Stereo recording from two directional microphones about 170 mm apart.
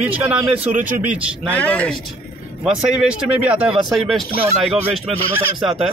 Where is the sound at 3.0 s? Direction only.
5° right (ahead or behind).